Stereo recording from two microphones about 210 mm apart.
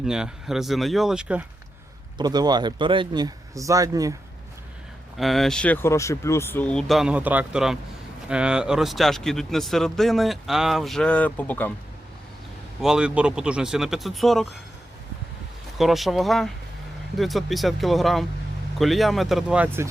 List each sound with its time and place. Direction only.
0.0 s speech: centre (ahead or behind)
2.1 s speech: 20° right (ahead or behind)
5.1 s speech: centre (ahead or behind)
12.8 s speech: 5° right (ahead or behind)
15.8 s speech: centre (ahead or behind)